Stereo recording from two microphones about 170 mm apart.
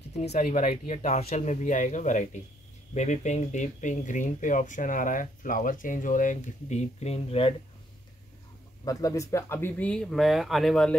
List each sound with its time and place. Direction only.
0.1 s speech: 40° left (ahead or behind)
0.5 s speech: 55° left (ahead or behind); by 7.5 s 35° left (ahead or behind)
8.8 s speech: 20° left (ahead or behind); by 11.0 s 5° left (ahead or behind)